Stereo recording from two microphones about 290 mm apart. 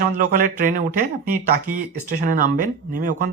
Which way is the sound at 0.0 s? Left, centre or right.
Right.